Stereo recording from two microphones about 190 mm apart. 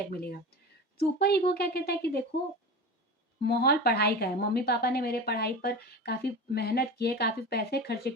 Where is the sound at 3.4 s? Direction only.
55° left (ahead or behind).